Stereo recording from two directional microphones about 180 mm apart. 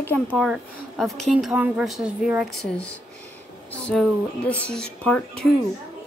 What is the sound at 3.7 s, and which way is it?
A woman's voice, 5° left (ahead or behind).